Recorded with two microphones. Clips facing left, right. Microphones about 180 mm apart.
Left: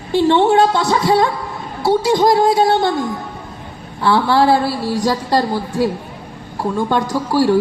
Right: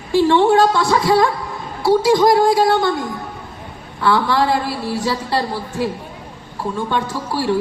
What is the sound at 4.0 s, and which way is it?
Speech, 30° left (ahead or behind).